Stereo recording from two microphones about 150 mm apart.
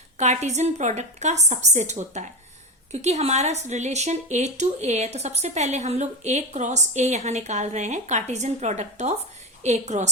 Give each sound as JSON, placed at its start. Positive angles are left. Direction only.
{"t": 0.2, "sound": "speech", "side_deg": -50}